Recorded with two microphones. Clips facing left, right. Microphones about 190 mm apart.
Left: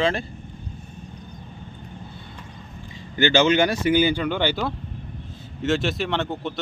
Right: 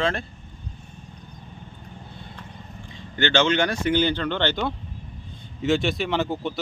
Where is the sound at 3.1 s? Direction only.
5° left (ahead or behind).